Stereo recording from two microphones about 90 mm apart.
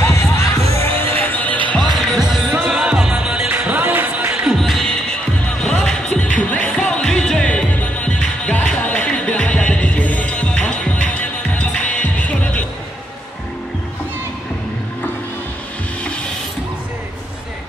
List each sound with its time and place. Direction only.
0.0 s music: 35° left (ahead or behind)
0.7 s music: 20° left (ahead or behind)
1.8 s music: centre (ahead or behind)
3.4 s music: 20° right (ahead or behind)
4.5 s music: centre (ahead or behind); by 12.6 s 15° left (ahead or behind)